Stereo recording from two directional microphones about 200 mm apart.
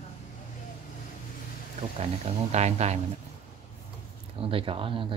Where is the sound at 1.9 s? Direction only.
30° right (ahead or behind).